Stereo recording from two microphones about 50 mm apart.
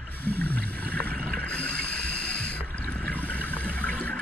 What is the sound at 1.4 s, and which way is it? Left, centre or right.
Water, left.